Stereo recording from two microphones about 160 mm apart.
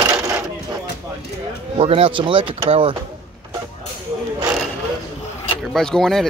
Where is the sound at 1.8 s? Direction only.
35° right (ahead or behind).